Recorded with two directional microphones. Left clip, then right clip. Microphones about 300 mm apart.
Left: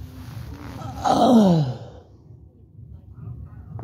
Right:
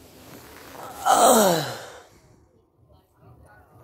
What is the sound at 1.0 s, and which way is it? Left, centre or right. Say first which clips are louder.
Groan: right 1 dB; right.